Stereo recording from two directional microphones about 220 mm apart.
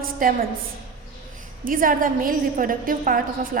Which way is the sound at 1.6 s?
40° right (ahead or behind).